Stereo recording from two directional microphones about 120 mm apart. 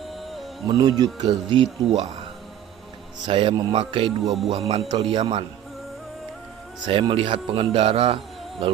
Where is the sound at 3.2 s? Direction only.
45° right (ahead or behind).